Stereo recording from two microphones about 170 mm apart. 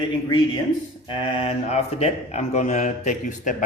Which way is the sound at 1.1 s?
30° left (ahead or behind).